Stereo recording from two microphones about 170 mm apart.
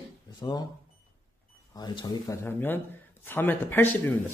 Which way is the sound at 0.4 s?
25° left (ahead or behind).